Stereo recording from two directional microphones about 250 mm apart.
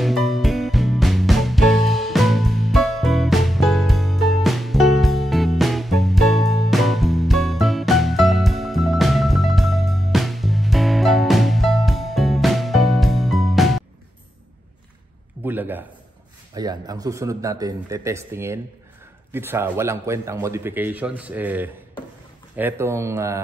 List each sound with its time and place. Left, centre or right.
0.0 s music: centre
15.4 s a sound: centre
16.5 s a man's voice: centre